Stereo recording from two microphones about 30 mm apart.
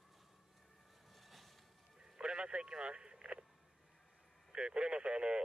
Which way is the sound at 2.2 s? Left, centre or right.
Right.